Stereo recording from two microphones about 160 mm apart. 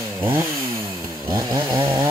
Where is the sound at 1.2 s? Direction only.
25° right (ahead or behind).